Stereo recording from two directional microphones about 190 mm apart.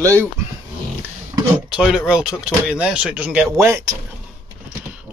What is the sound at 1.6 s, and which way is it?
Speech, 5° right (ahead or behind).